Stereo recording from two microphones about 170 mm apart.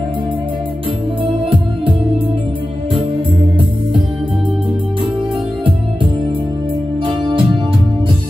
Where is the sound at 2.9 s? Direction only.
30° right (ahead or behind).